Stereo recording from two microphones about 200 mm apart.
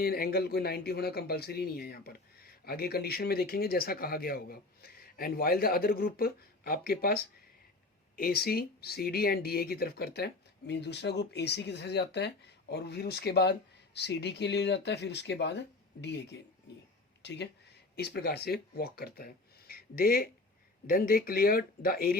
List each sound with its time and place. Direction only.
0.0 s speech: 50° left (ahead or behind)